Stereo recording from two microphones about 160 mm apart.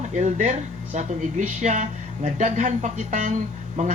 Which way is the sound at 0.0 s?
50° right (ahead or behind).